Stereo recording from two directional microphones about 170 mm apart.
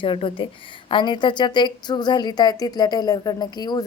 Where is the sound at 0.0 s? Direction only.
30° left (ahead or behind).